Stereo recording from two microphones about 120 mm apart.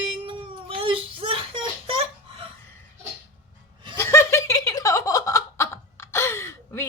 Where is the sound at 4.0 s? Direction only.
20° left (ahead or behind).